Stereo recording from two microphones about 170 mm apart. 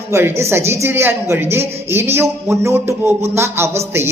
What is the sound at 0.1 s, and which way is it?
A man's voice, 15° right (ahead or behind).